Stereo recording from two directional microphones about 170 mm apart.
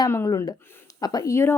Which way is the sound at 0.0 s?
20° left (ahead or behind).